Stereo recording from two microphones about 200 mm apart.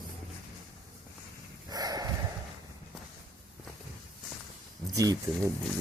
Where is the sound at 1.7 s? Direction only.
20° right (ahead or behind).